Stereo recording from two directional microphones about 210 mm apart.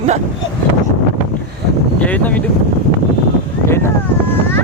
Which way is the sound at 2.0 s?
5° left (ahead or behind).